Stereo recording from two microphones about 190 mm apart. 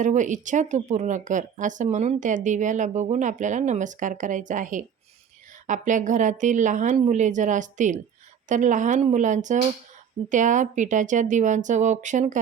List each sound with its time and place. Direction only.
0.0 s a woman's voice: 40° right (ahead or behind)